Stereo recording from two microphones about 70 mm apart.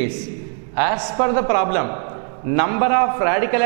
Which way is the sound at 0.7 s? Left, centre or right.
Centre.